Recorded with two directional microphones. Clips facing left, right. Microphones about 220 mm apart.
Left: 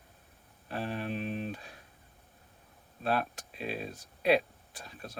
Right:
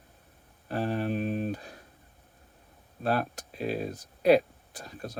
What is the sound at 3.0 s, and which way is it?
Speech, 40° right (ahead or behind).